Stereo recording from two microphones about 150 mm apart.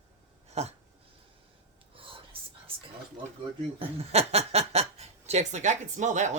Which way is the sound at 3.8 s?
45° right (ahead or behind).